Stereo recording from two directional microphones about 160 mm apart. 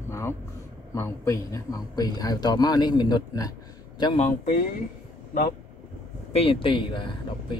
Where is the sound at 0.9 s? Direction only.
20° left (ahead or behind).